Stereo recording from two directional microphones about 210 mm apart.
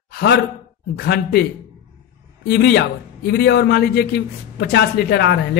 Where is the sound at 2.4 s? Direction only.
50° left (ahead or behind).